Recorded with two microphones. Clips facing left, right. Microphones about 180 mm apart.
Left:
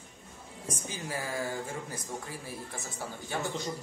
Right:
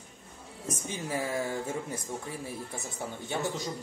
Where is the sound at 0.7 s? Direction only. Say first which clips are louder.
Right 3 dB; 25° right (ahead or behind).